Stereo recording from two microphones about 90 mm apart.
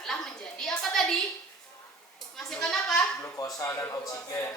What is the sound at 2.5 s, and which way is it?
Speech, 5° left (ahead or behind).